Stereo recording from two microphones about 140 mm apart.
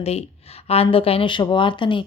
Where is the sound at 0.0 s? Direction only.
45° left (ahead or behind).